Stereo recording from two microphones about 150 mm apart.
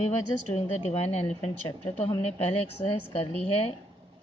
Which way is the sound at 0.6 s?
45° left (ahead or behind).